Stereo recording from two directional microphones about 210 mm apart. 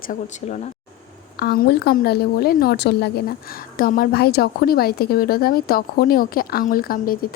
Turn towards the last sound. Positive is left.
turn(degrees=45)  # may be behind; listen again after turning